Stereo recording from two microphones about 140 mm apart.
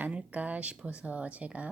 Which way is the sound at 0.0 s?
10° right (ahead or behind).